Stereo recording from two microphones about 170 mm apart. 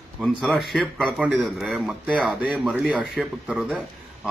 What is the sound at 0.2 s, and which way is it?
A man's voice, centre (ahead or behind).